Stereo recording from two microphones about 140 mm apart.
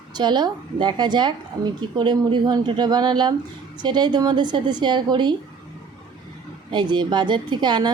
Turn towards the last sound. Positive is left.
turn(degrees=-30)  # may be behind; listen again after turning